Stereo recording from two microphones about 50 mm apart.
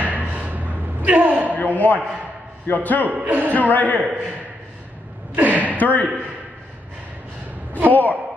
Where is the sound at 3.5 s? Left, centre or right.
Left.